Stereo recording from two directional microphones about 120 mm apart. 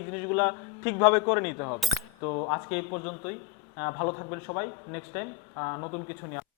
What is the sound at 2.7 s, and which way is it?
Speech, 20° left (ahead or behind).